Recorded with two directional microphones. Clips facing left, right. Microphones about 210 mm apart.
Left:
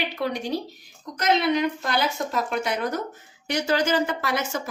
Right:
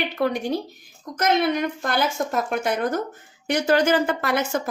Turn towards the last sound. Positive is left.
turn(degrees=-55)  # may be behind; listen again after turning